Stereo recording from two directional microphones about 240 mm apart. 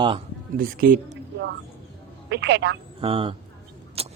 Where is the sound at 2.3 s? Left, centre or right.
Right.